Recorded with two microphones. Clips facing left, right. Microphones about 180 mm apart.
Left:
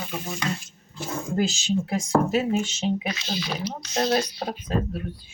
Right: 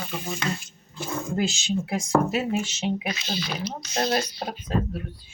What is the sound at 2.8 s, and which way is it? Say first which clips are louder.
Speech: left 1 dB; centre (ahead or behind).